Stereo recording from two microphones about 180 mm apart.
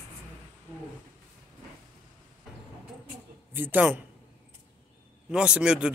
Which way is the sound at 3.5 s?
10° right (ahead or behind).